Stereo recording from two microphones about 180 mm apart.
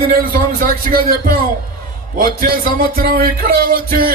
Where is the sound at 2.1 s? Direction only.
55° right (ahead or behind).